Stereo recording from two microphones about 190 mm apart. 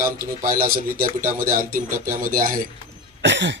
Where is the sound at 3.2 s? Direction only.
70° right (ahead or behind).